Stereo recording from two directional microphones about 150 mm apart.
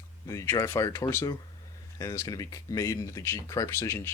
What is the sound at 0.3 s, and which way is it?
Speech, 20° left (ahead or behind).